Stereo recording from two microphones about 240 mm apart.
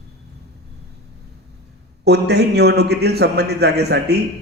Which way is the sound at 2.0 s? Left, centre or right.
Right.